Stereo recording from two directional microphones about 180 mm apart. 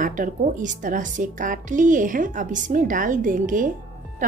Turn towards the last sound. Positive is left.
turn(degrees=-50)  # may be behind; listen again after turning